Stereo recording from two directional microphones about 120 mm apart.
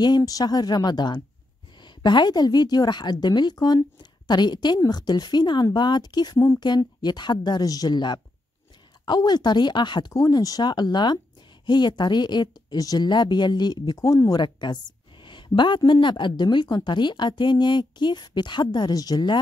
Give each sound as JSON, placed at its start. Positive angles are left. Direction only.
{"t": 0.0, "sound": "a woman's voice", "side_deg": 35}
{"t": 6.3, "sound": "speech", "side_deg": 25}
{"t": 6.6, "sound": "a woman's voice", "side_deg": 35}